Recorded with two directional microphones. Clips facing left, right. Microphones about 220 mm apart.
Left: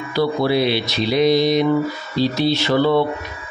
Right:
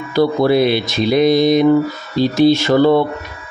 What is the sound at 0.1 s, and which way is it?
Speech, 50° right (ahead or behind).